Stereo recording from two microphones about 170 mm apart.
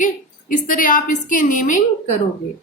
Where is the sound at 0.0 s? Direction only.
50° left (ahead or behind).